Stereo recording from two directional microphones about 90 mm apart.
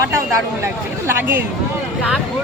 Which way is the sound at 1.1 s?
25° right (ahead or behind).